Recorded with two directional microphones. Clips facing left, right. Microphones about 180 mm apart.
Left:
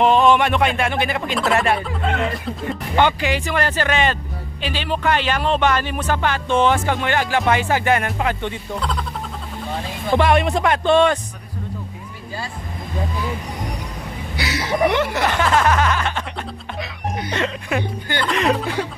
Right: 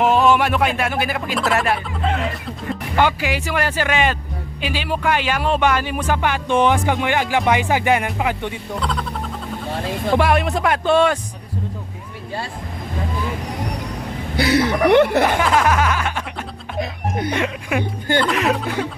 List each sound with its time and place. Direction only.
0.0 s speech: 5° right (ahead or behind)
8.7 s speech: centre (ahead or behind)
10.1 s speech: 5° right (ahead or behind)
14.3 s speech: 55° right (ahead or behind)
15.2 s speech: 10° right (ahead or behind)
17.3 s speech: 10° right (ahead or behind)